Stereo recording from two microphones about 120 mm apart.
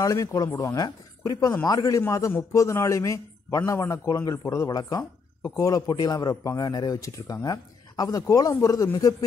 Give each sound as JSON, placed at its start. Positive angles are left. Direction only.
{"t": 0.0, "sound": "speech", "side_deg": 30}